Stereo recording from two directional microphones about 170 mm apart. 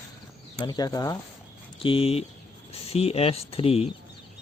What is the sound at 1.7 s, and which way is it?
Speech, 30° left (ahead or behind).